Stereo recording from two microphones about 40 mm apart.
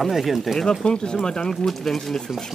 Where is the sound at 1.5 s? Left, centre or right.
Centre.